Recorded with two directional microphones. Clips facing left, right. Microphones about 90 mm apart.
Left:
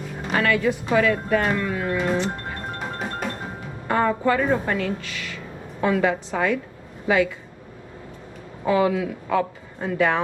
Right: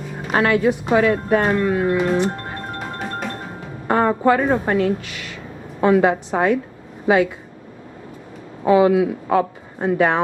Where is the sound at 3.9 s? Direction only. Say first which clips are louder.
Right 4 dB; 35° right (ahead or behind).